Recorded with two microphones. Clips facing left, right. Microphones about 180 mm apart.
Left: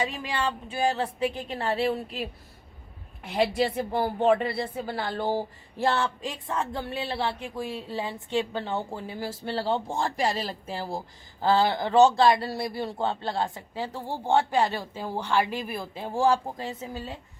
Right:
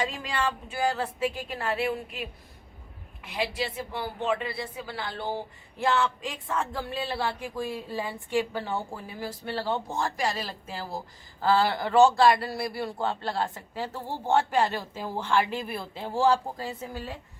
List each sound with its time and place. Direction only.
0.0 s speech: 20° left (ahead or behind); by 2.3 s 35° left (ahead or behind)
3.2 s a woman's voice: 45° left (ahead or behind); by 17.2 s 20° left (ahead or behind)